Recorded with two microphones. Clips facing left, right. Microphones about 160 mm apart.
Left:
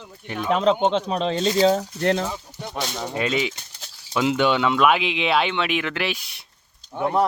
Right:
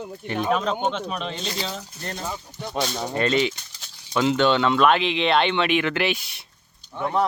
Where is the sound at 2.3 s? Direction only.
5° left (ahead or behind).